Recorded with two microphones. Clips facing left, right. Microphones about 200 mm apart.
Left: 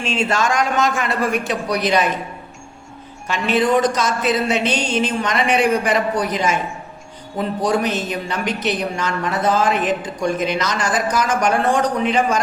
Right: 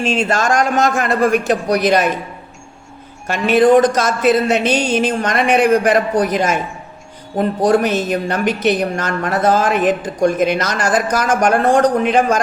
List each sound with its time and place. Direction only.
0.0 s a woman's voice: 45° right (ahead or behind)
3.5 s a woman's voice: 50° right (ahead or behind)